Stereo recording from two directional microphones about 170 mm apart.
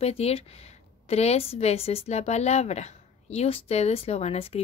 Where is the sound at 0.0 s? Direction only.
35° left (ahead or behind).